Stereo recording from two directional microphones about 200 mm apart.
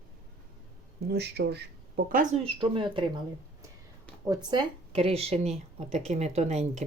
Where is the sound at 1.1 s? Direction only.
55° right (ahead or behind).